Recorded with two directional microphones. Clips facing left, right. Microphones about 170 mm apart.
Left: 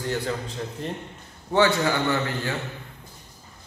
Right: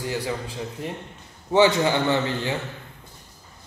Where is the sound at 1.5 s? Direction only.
20° right (ahead or behind).